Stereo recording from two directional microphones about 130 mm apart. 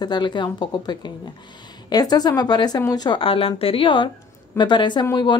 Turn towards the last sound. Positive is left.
turn(degrees=35)  # may be behind; listen again after turning